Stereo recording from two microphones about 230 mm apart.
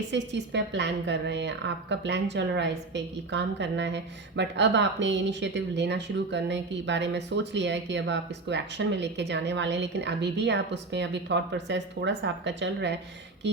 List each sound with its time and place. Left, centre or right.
0.1 s a woman's voice: right